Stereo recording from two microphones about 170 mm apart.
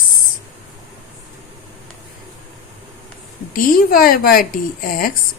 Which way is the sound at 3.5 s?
55° left (ahead or behind).